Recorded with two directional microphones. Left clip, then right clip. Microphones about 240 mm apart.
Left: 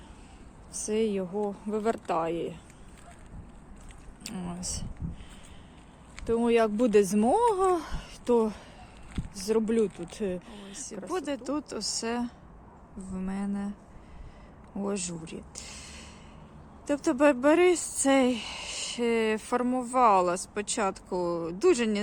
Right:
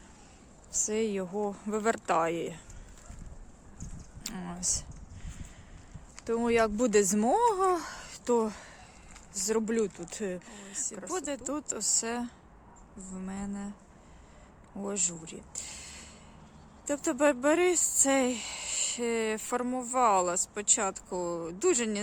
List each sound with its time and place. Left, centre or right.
0.7 s speech: centre
4.2 s speech: centre
6.1 s speech: centre
14.8 s speech: centre